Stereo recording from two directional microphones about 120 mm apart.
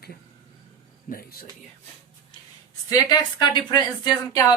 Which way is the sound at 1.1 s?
90° left.